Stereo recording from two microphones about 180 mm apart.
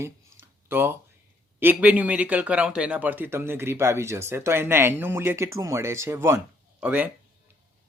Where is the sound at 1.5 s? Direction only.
10° right (ahead or behind).